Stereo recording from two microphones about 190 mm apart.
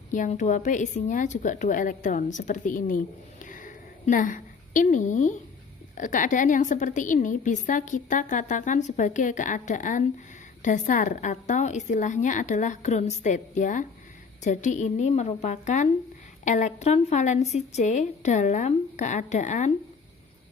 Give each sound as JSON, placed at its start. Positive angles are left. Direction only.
{"t": 0.1, "sound": "a woman's voice", "side_deg": 40}
{"t": 3.4, "sound": "a sound", "side_deg": 45}
{"t": 6.0, "sound": "a woman's voice", "side_deg": 40}